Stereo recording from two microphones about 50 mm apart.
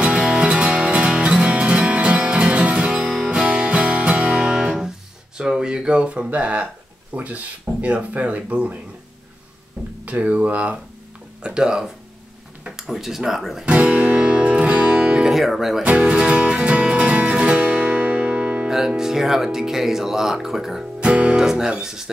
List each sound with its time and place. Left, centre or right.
0.0 s music: right
5.6 s speech: centre
10.0 s speech: right
11.4 s speech: centre
12.6 s a sound: centre
12.9 s speech: centre
13.7 s music: right
15.2 s speech: centre
15.8 s music: right
18.7 s speech: centre
21.0 s music: right
21.4 s speech: centre